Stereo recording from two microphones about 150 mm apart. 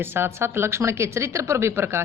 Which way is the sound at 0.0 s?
15° right (ahead or behind).